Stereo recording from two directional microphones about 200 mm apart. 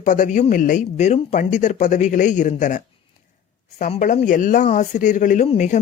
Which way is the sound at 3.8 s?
40° left (ahead or behind).